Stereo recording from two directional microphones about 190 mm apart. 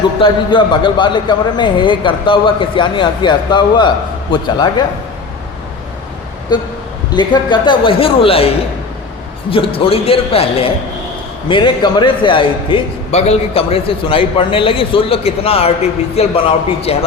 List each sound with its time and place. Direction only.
0.2 s a man's voice: 25° left (ahead or behind)
6.5 s a man's voice: 20° left (ahead or behind)
9.5 s a man's voice: 30° left (ahead or behind)